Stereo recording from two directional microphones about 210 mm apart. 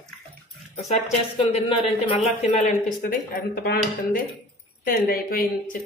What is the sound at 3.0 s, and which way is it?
Speech, 45° left (ahead or behind).